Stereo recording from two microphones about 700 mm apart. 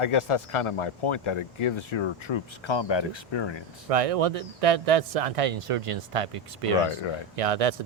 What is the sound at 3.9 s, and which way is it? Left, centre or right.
Speech, right.